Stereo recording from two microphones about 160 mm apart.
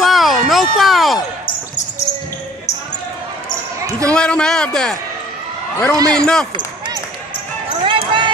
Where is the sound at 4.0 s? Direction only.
5° left (ahead or behind).